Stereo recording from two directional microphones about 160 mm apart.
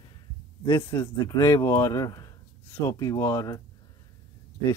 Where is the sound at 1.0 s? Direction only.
20° left (ahead or behind).